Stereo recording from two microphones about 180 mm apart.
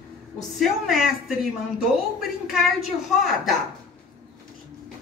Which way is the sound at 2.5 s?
Centre (ahead or behind).